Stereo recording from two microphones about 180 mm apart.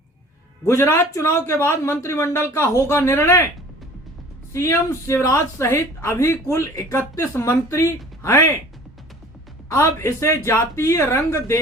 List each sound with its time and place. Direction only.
0.6 s speech: 15° left (ahead or behind)
4.5 s speech: 15° left (ahead or behind)
9.6 s speech: 15° left (ahead or behind)